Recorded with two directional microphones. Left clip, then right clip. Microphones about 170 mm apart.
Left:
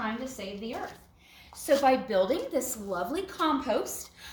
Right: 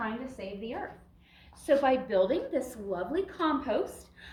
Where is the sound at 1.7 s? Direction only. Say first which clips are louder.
Left 2 dB; 20° left (ahead or behind).